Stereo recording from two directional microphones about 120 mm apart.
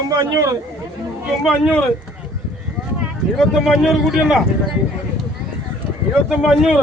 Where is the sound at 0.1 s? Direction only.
30° right (ahead or behind).